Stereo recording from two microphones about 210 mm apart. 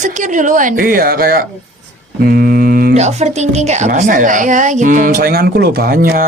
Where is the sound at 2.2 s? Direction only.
45° right (ahead or behind).